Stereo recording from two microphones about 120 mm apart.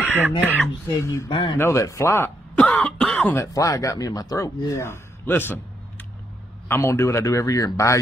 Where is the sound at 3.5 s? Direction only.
25° left (ahead or behind).